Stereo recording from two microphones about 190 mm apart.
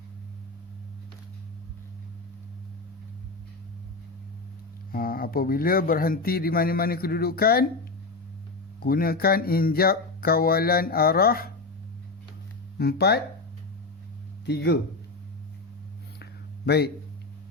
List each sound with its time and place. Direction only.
4.9 s speech: 50° left (ahead or behind)
8.8 s speech: 50° left (ahead or behind)
12.8 s speech: 55° left (ahead or behind)
14.4 s speech: 60° left (ahead or behind)
16.6 s speech: 60° left (ahead or behind)